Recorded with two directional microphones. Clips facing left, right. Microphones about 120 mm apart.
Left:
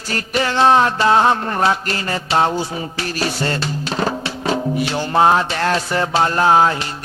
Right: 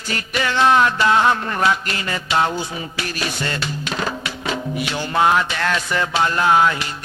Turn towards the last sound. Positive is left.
turn(degrees=35)  # may be behind; listen again after turning